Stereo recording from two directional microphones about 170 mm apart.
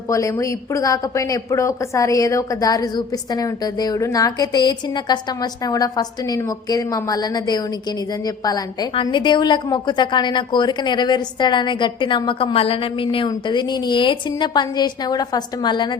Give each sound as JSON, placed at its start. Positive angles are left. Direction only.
{"t": 0.1, "sound": "a woman's voice", "side_deg": 20}